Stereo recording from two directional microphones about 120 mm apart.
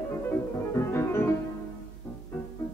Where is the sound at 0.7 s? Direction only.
20° left (ahead or behind).